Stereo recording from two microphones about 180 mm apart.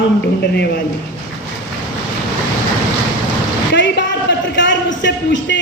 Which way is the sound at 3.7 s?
75° left (ahead or behind).